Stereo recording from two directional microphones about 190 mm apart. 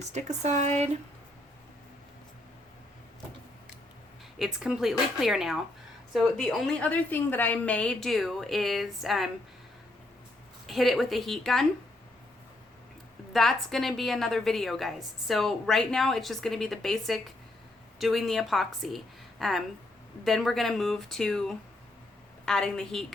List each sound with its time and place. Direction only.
0.1 s speech: 35° right (ahead or behind)
4.4 s a woman's voice: centre (ahead or behind)
10.7 s a woman's voice: centre (ahead or behind)
13.3 s a woman's voice: centre (ahead or behind)